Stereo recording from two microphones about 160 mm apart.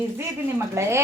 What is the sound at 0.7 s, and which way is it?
Speech, 15° right (ahead or behind).